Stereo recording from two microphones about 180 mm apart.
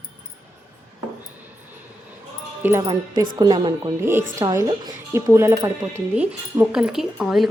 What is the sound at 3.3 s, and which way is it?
A woman's voice, 25° right (ahead or behind).